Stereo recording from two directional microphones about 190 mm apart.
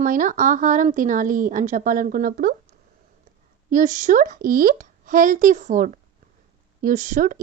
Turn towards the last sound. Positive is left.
turn(degrees=-45)  # may be behind; listen again after turning